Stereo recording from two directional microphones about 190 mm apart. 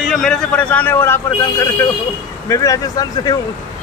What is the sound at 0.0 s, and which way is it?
A man's voice, centre (ahead or behind).